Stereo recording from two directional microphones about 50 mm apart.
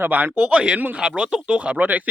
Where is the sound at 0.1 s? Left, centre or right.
Right.